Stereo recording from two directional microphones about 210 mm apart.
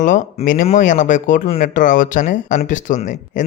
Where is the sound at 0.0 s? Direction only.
35° left (ahead or behind).